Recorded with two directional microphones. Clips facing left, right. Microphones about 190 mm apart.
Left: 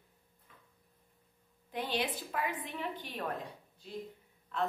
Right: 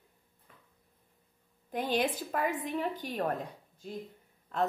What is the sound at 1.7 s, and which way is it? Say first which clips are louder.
A woman's voice: right 5 dB; 45° right (ahead or behind).